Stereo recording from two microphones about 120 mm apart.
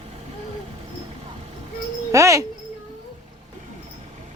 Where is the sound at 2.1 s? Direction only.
25° right (ahead or behind).